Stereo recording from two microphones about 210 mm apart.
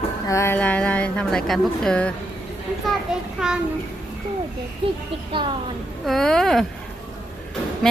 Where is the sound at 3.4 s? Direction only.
Centre (ahead or behind).